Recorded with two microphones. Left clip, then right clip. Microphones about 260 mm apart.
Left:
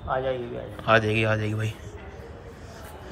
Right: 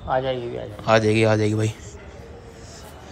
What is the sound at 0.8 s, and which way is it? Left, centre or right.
Speech, centre.